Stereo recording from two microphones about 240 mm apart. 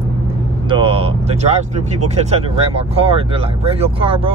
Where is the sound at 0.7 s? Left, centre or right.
Right.